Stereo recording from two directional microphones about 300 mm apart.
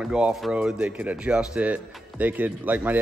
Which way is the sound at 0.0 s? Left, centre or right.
Centre.